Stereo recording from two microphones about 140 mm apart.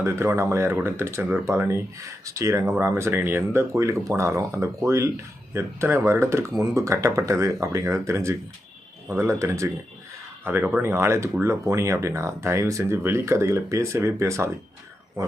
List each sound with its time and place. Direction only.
0.0 s speech: 20° right (ahead or behind)